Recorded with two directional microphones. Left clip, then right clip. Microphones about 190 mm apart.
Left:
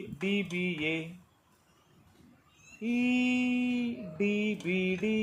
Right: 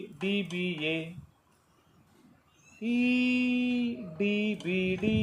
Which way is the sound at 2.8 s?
10° left (ahead or behind).